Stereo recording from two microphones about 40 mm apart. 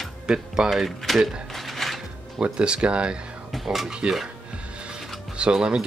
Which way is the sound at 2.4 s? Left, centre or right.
Right.